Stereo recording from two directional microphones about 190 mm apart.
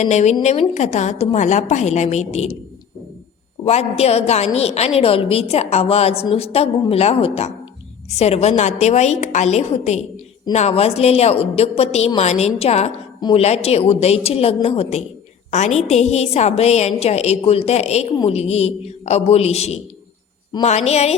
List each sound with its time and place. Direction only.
0.0 s a woman's voice: 40° left (ahead or behind)
3.6 s a woman's voice: 35° left (ahead or behind)